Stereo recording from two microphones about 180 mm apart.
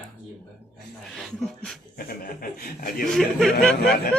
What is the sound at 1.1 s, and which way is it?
Speech, centre (ahead or behind).